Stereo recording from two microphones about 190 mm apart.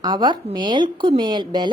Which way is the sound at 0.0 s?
20° right (ahead or behind).